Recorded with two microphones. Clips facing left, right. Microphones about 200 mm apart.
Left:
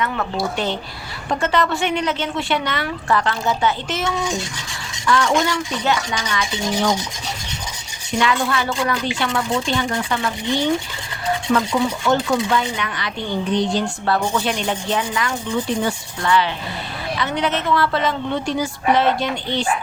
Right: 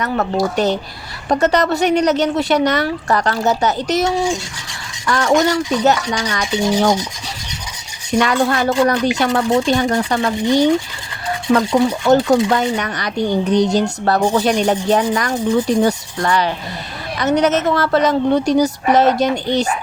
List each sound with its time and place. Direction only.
0.0 s a woman's voice: 40° right (ahead or behind)
8.2 s a woman's voice: 45° right (ahead or behind)